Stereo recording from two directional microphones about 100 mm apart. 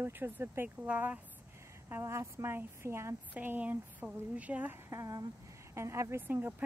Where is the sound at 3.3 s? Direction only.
15° right (ahead or behind).